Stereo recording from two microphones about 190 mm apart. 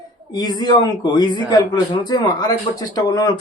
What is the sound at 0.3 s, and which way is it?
Speech, 20° left (ahead or behind).